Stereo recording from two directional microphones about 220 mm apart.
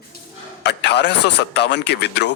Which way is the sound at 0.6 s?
50° left (ahead or behind).